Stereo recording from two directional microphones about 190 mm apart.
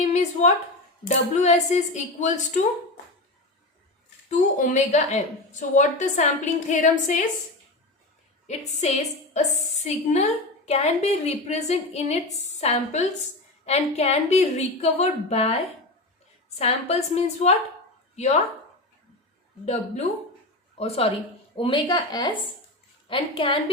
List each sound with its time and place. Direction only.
0.0 s a sound: 35° left (ahead or behind)
1.0 s a woman's voice: 35° left (ahead or behind)
4.3 s a woman's voice: 40° left (ahead or behind)
8.4 s a woman's voice: 35° left (ahead or behind)
16.6 s a woman's voice: 35° left (ahead or behind)
19.6 s a woman's voice: 35° left (ahead or behind)